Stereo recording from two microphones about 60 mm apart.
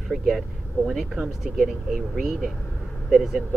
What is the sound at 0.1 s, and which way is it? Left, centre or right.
Speech, centre.